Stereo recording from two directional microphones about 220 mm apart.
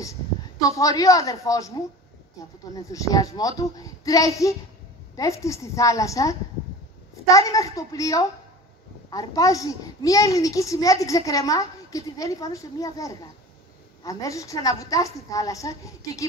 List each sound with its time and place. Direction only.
0.6 s a child's voice: 15° left (ahead or behind)
2.7 s a child's voice: 15° left (ahead or behind)